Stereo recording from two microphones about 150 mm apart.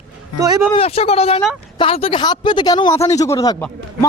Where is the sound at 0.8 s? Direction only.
40° left (ahead or behind); by 3.6 s 25° left (ahead or behind).